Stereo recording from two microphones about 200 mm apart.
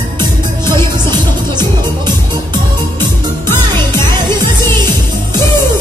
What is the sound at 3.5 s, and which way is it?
Music, 10° left (ahead or behind).